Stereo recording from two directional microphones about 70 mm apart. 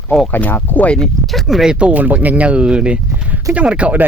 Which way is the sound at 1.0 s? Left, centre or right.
Centre.